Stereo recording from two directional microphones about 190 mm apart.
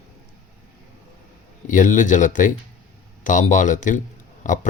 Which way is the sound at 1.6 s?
40° left (ahead or behind).